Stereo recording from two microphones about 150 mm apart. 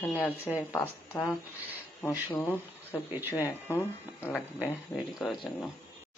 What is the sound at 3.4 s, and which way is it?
Speech, 20° left (ahead or behind).